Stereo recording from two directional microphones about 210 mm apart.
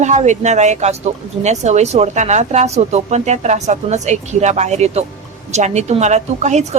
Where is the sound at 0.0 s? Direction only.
35° right (ahead or behind).